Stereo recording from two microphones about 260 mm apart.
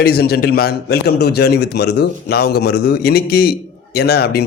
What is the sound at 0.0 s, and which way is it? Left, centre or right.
A man's voice, left.